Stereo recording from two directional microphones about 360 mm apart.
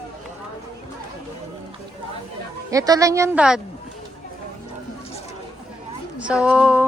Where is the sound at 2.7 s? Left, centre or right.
Centre.